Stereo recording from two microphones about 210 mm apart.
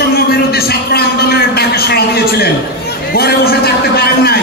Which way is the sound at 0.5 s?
45° left (ahead or behind).